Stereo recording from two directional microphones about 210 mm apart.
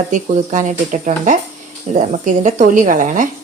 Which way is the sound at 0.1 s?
35° right (ahead or behind).